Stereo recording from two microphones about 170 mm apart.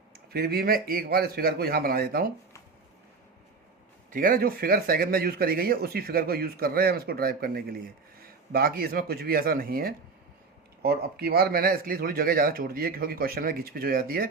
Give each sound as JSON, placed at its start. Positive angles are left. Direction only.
{"t": 0.3, "sound": "a man's voice", "side_deg": -65}
{"t": 4.1, "sound": "a man's voice", "side_deg": -55}